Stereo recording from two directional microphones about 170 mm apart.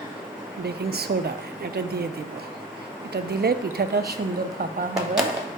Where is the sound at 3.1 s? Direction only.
70° right (ahead or behind).